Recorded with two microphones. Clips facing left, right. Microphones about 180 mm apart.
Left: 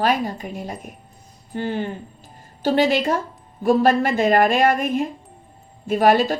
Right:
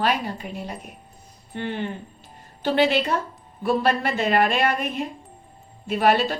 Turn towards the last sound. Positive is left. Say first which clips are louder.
# left 4 dB
turn(degrees=40)  # may be behind; listen again after turning